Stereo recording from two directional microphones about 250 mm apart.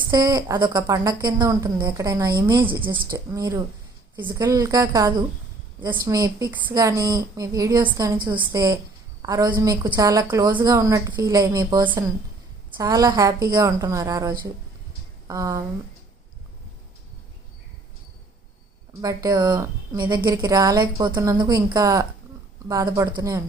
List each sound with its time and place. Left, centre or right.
0.1 s a woman's voice: centre
19.0 s a woman's voice: centre